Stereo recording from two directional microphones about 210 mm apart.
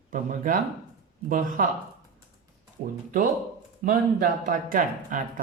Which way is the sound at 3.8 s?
40° right (ahead or behind).